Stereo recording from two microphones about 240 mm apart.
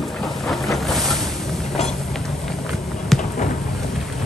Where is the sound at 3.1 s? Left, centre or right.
Centre.